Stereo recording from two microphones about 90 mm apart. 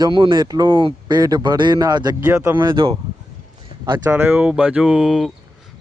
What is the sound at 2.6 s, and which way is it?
Speech, 70° right (ahead or behind).